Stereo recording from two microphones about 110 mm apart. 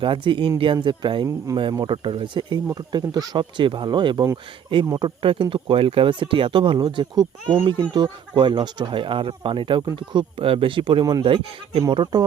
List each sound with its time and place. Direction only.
0.0 s speech: 50° right (ahead or behind)
1.5 s speech: 30° right (ahead or behind)
1.9 s speech: 50° right (ahead or behind)